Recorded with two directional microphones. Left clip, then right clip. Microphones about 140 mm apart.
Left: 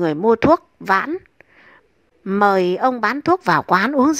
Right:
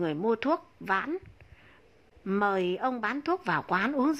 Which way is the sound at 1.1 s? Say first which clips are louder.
Left 9 dB; 40° left (ahead or behind).